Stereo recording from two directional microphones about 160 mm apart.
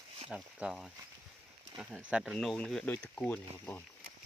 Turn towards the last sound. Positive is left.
turn(degrees=10)  # may be behind; listen again after turning